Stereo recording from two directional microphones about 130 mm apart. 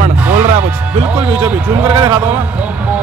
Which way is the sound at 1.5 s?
20° right (ahead or behind).